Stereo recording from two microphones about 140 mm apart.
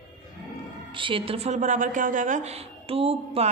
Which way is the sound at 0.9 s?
35° right (ahead or behind).